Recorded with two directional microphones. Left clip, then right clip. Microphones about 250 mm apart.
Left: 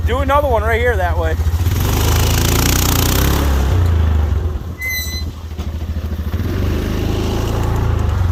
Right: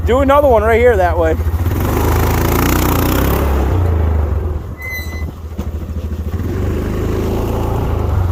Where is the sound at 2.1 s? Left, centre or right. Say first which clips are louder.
Right 2 dB; right.